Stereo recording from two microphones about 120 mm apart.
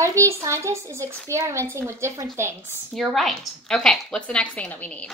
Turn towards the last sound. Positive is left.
turn(degrees=10)  # may be behind; listen again after turning